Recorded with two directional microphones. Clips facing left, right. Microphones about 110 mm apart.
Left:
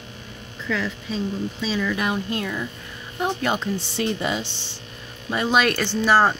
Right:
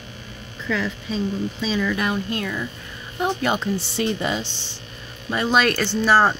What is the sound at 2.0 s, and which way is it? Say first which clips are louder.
Speech: right 1 dB; 20° left (ahead or behind).